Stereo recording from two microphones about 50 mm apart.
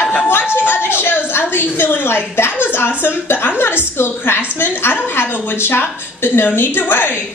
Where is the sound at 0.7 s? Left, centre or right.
Left.